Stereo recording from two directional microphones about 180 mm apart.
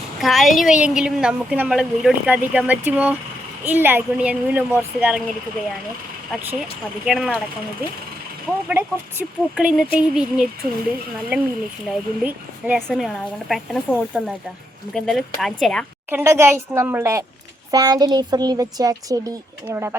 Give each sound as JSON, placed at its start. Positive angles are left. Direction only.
{"t": 0.2, "sound": "a woman's voice", "side_deg": 0}
{"t": 6.6, "sound": "a woman's voice", "side_deg": 0}
{"t": 8.7, "sound": "a woman's voice", "side_deg": -10}
{"t": 16.0, "sound": "a woman's voice", "side_deg": -15}